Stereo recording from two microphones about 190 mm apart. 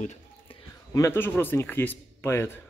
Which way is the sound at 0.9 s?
15° left (ahead or behind).